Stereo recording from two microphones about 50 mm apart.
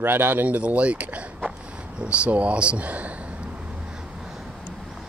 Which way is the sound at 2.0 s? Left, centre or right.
Right.